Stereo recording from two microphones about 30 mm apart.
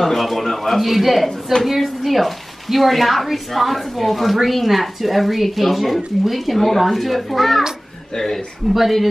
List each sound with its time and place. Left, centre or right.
0.0 s a woman's voice: centre
8.6 s a woman's voice: centre